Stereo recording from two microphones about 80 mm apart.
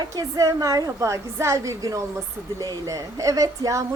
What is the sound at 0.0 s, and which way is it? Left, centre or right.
Speech, right.